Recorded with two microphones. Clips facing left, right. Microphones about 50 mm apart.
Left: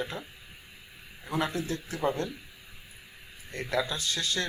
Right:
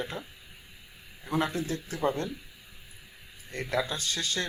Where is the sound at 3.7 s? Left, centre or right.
Centre.